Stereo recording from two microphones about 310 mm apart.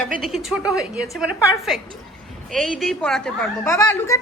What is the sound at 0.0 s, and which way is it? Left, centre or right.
A woman's voice, centre.